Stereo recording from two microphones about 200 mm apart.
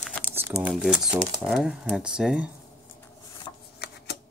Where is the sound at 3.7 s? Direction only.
55° left (ahead or behind).